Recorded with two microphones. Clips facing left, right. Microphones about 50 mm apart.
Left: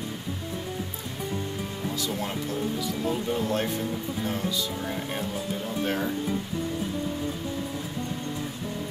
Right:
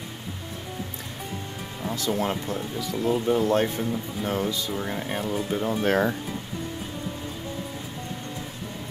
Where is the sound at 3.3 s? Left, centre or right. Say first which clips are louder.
Right 5 dB; right.